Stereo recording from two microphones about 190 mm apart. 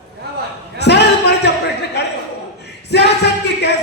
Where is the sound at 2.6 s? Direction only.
60° left (ahead or behind).